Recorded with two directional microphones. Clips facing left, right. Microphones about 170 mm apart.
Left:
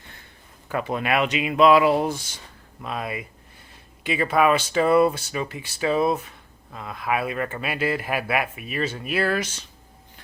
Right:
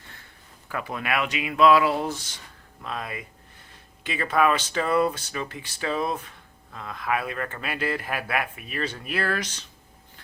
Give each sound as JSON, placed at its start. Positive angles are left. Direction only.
{"t": 0.7, "sound": "speech", "side_deg": 25}